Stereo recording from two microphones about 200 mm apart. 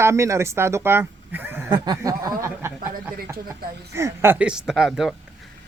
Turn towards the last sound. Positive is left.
turn(degrees=0)  # may be behind; listen again after turning